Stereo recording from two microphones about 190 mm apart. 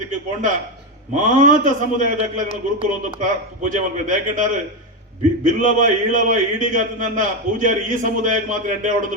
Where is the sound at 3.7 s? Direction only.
40° right (ahead or behind).